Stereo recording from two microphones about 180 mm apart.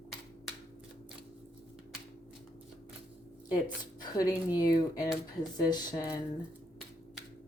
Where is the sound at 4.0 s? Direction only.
20° left (ahead or behind).